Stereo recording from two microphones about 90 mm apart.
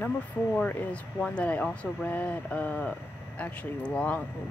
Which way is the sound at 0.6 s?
15° left (ahead or behind).